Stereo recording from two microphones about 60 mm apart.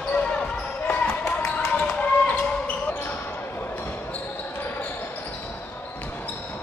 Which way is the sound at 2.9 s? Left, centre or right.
Left.